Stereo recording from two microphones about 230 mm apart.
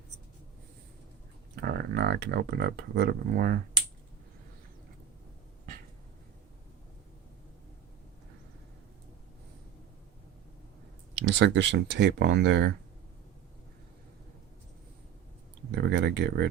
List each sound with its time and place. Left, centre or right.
1.6 s speech: right
11.1 s speech: right
15.7 s speech: right